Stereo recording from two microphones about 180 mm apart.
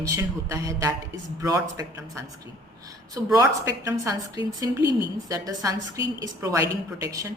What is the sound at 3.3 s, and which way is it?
A woman's voice, 20° right (ahead or behind).